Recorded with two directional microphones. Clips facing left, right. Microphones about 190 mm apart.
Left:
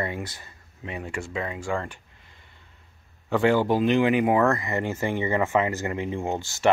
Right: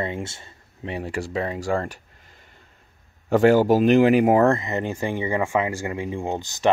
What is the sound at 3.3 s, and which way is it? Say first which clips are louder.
Speech: right 5 dB; 40° right (ahead or behind).